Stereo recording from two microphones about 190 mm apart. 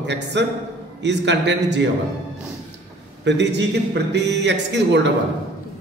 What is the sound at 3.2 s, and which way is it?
Speech, 65° right (ahead or behind).